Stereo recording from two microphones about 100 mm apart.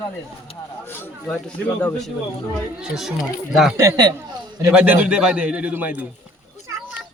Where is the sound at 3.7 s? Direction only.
35° right (ahead or behind).